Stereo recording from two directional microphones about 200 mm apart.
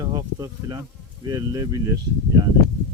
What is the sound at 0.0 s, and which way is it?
Speech, 20° right (ahead or behind).